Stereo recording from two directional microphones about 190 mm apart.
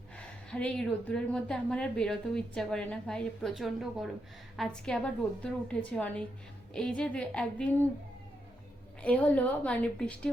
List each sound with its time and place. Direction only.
0.5 s a woman's voice: 5° left (ahead or behind)
9.0 s a woman's voice: 5° left (ahead or behind)